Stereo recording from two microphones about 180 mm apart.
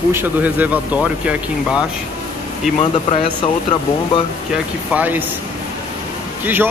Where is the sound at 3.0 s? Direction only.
30° left (ahead or behind).